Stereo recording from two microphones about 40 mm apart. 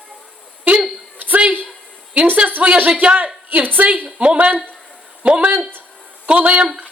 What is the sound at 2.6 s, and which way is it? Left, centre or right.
Speech, right.